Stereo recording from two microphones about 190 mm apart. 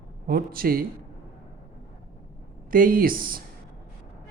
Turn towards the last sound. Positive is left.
turn(degrees=-50)  # may be behind; listen again after turning